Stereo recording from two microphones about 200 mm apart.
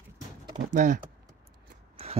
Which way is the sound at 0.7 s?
40° right (ahead or behind).